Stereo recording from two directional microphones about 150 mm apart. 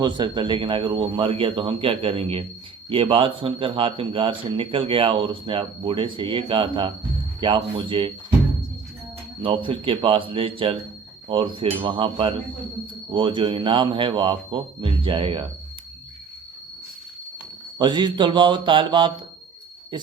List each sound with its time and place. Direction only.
0.0 s a man's voice: 30° right (ahead or behind)
9.4 s a man's voice: 35° right (ahead or behind)
17.7 s a man's voice: 30° right (ahead or behind)